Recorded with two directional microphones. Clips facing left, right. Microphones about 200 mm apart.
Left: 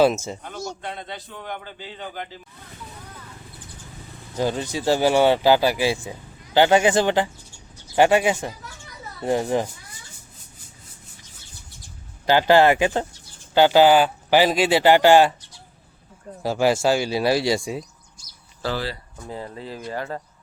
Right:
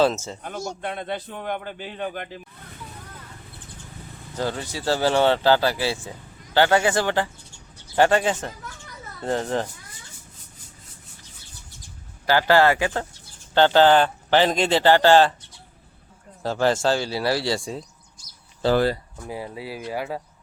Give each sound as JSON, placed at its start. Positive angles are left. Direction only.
{"t": 0.0, "sound": "speech", "side_deg": 15}
{"t": 0.4, "sound": "a man's voice", "side_deg": -50}
{"t": 4.4, "sound": "speech", "side_deg": 20}
{"t": 12.2, "sound": "speech", "side_deg": 20}
{"t": 16.4, "sound": "speech", "side_deg": 10}
{"t": 18.7, "sound": "speech", "side_deg": -50}
{"t": 19.3, "sound": "speech", "side_deg": -10}